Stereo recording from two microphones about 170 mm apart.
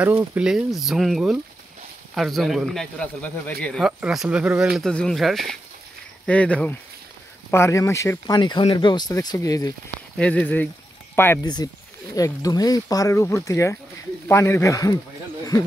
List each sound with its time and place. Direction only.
0.0 s speech: 15° right (ahead or behind); by 8.4 s 15° left (ahead or behind)
8.4 s speech: 30° left (ahead or behind)
10.1 s speech: 10° left (ahead or behind)
11.4 s speech: 25° left (ahead or behind)